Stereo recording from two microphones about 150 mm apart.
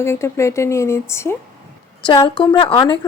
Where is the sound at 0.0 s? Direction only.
20° left (ahead or behind).